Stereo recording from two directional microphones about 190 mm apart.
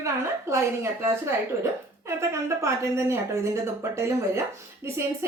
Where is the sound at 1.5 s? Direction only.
15° right (ahead or behind).